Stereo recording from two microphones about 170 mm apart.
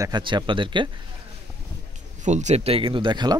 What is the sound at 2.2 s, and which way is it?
Speech, 45° right (ahead or behind).